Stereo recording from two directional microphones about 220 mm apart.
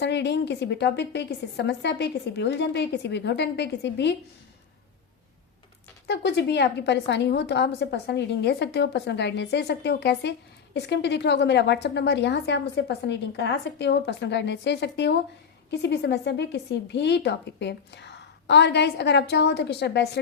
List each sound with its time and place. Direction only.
0.0 s a woman's voice: 50° left (ahead or behind)
6.1 s a woman's voice: 50° left (ahead or behind)